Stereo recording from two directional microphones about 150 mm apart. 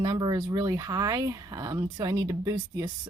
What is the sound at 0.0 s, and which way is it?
A woman's voice, 25° right (ahead or behind).